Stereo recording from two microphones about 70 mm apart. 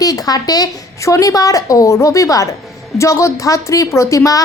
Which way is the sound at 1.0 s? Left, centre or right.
Left.